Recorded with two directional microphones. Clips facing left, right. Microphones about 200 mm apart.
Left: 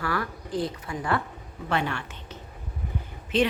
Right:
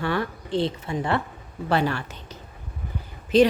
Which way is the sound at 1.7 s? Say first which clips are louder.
Right 5 dB; 35° right (ahead or behind).